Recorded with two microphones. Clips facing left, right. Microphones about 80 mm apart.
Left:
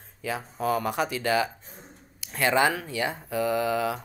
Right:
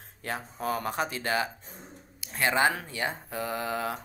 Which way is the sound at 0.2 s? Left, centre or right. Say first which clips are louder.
Left 3 dB; right.